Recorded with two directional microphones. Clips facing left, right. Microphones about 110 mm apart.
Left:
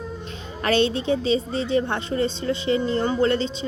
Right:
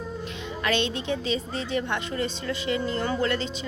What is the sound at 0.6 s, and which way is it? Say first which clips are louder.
A woman's voice: left 6 dB; 35° left (ahead or behind).